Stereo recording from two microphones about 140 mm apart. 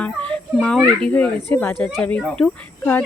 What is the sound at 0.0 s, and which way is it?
Speech, 10° left (ahead or behind).